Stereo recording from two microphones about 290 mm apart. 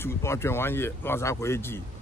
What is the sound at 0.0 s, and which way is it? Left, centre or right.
Speech, centre.